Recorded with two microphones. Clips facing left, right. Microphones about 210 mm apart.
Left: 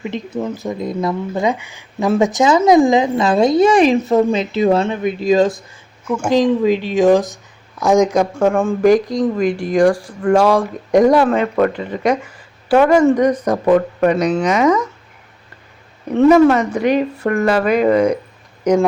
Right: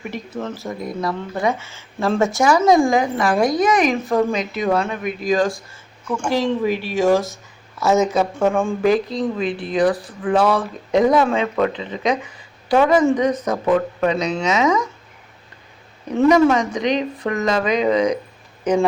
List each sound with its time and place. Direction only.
0.0 s speech: 15° left (ahead or behind)
8.4 s speech: 5° right (ahead or behind)
8.8 s speech: 15° left (ahead or behind)
16.1 s speech: 5° left (ahead or behind)